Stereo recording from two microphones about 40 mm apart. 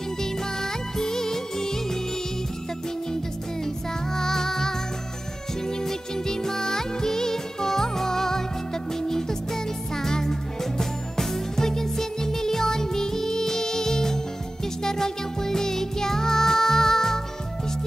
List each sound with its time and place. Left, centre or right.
0.2 s music: centre
3.6 s music: centre
5.8 s music: centre